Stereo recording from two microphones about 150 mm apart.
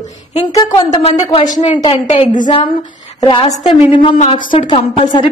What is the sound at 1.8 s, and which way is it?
Speech, 40° left (ahead or behind).